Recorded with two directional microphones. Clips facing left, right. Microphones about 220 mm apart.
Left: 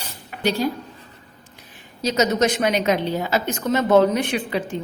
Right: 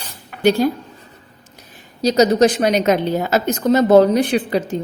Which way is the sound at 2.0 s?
35° right (ahead or behind).